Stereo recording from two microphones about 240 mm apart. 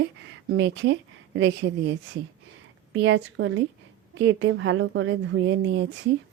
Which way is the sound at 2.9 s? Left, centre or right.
Right.